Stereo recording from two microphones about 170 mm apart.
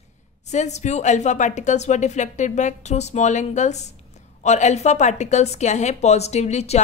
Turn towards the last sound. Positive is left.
turn(degrees=40)  # may be behind; listen again after turning